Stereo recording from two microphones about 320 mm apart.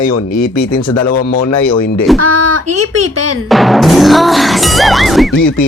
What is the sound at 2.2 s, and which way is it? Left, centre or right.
Speech, right.